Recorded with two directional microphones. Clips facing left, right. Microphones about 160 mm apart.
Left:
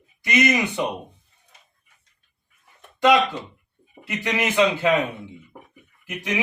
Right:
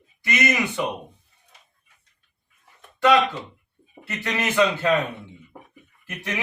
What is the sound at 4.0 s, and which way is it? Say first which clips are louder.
A man's voice: left 2 dB; 15° left (ahead or behind).